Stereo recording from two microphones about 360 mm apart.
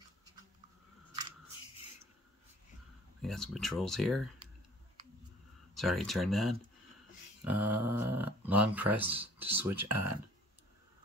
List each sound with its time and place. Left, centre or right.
3.2 s speech: centre
5.8 s speech: centre
9.8 s speech: right